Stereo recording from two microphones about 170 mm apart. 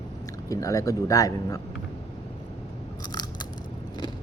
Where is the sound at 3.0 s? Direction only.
25° left (ahead or behind).